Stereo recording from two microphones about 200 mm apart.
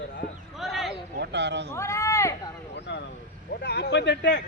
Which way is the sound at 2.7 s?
60° left (ahead or behind).